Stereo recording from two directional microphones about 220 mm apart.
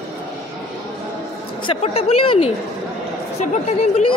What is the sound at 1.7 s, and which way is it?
Speech, 25° left (ahead or behind).